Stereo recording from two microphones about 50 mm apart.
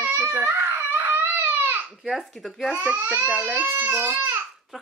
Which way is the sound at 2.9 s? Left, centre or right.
Right.